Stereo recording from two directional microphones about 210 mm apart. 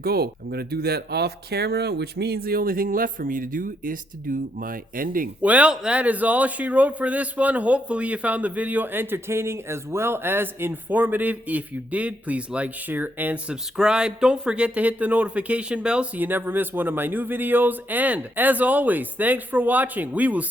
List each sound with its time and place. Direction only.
0.0 s speech: 50° right (ahead or behind)
5.4 s a man's voice: 5° right (ahead or behind)